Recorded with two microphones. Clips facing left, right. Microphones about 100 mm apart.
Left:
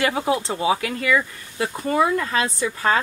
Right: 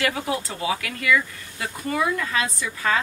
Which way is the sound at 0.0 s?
25° left (ahead or behind).